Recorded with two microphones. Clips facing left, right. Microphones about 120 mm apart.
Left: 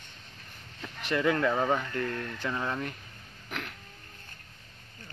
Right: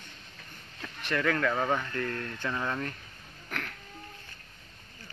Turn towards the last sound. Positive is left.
turn(degrees=10)  # may be behind; listen again after turning